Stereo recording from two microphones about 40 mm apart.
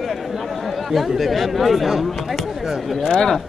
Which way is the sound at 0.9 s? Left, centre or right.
Centre.